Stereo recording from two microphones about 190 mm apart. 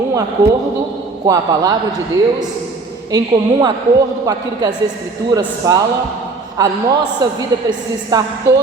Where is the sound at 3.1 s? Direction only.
20° right (ahead or behind).